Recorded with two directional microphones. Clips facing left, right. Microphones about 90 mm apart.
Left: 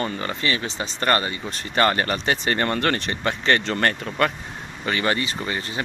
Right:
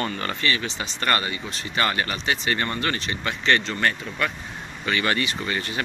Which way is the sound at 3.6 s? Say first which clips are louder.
Left 2 dB; 50° left (ahead or behind).